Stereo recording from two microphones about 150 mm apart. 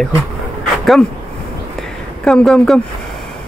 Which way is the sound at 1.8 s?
5° left (ahead or behind).